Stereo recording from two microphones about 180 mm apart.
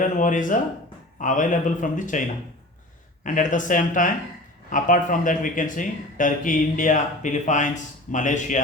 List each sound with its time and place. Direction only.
0.0 s speech: 45° left (ahead or behind)
3.2 s speech: 45° left (ahead or behind)